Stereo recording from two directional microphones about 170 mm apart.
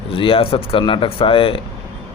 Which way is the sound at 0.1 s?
30° left (ahead or behind).